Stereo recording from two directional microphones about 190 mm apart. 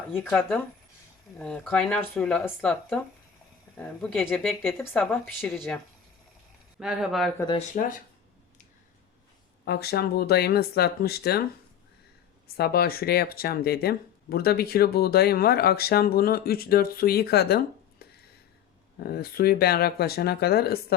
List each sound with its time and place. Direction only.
0.2 s speech: 5° left (ahead or behind)
7.3 s speech: 20° left (ahead or behind)
9.6 s speech: 55° left (ahead or behind)
12.5 s speech: 55° left (ahead or behind)
18.0 s a sound: 55° left (ahead or behind)
18.9 s speech: 55° left (ahead or behind)